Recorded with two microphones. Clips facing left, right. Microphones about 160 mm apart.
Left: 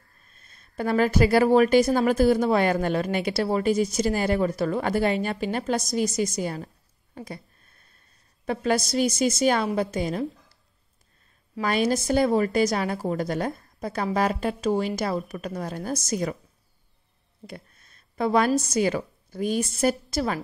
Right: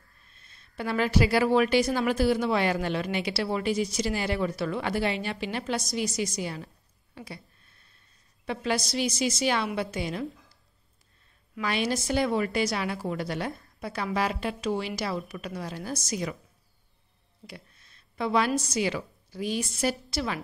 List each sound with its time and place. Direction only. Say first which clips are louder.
0.3 s a woman's voice: left 2 dB; 45° left (ahead or behind)
7.2 s a sound: left 5 dB; 45° left (ahead or behind)
8.5 s a woman's voice: left 5 dB; 45° left (ahead or behind)
11.6 s a woman's voice: left 5 dB; 45° left (ahead or behind)
17.5 s a sound: left 5 dB; 50° left (ahead or behind)
18.6 s a woman's voice: left 5 dB; 45° left (ahead or behind)